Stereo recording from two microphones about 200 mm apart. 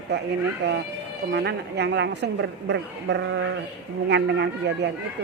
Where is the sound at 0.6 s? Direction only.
55° right (ahead or behind).